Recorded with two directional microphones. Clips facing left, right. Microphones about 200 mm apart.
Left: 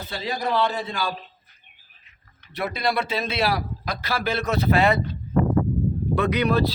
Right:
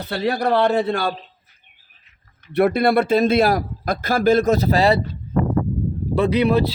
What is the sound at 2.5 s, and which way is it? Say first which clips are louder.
A man's voice: right 10 dB; 60° right (ahead or behind).